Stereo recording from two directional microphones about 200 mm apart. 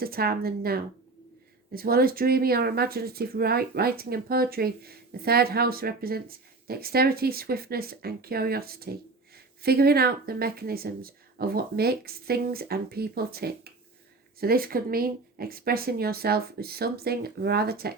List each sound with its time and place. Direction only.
0.0 s speech: 50° right (ahead or behind)